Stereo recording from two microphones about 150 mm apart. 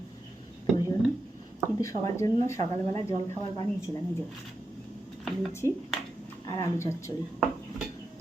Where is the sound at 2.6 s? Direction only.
45° right (ahead or behind).